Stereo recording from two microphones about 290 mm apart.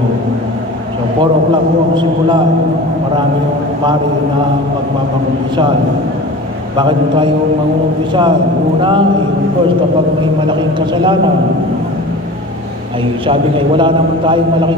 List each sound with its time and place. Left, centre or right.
6.8 s a man's voice: centre
13.3 s a man's voice: centre